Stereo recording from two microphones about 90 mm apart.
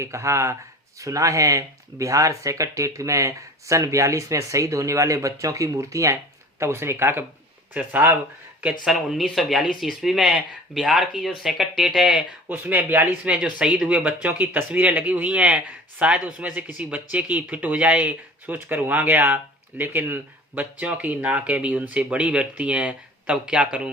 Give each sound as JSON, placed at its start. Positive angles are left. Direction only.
{"t": 0.0, "sound": "speech", "side_deg": -35}
{"t": 8.8, "sound": "speech", "side_deg": -5}
{"t": 12.5, "sound": "speech", "side_deg": -20}